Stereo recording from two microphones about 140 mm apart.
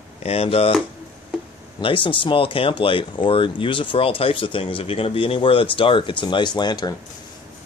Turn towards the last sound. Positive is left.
turn(degrees=30)  # may be behind; listen again after turning